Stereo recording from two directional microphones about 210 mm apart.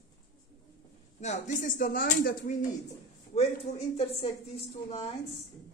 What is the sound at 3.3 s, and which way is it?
Speech, 30° left (ahead or behind).